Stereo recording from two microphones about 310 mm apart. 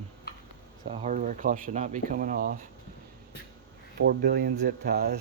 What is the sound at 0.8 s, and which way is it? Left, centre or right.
Speech, right.